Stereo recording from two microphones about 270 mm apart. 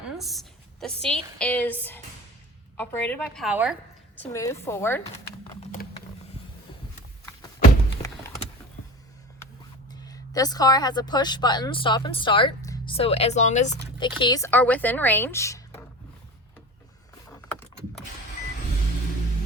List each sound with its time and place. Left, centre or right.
0.2 s a sound: centre
1.0 s a woman's voice: centre
4.2 s speech: centre
9.9 s speech: centre